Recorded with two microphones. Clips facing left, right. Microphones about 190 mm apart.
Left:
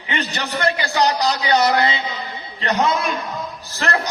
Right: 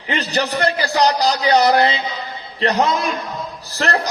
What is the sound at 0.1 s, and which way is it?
A man's voice, 35° right (ahead or behind).